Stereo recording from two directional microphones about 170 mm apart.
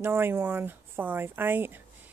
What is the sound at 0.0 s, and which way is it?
Speech, 15° right (ahead or behind).